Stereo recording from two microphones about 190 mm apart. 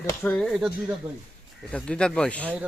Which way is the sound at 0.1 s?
10° left (ahead or behind).